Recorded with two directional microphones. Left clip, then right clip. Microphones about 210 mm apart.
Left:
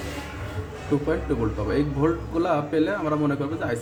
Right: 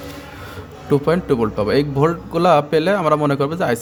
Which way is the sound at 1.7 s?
45° right (ahead or behind).